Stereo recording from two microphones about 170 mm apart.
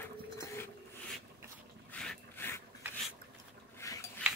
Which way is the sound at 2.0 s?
10° left (ahead or behind).